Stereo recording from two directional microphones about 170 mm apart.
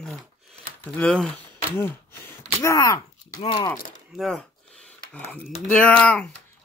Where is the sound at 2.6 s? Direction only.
15° left (ahead or behind).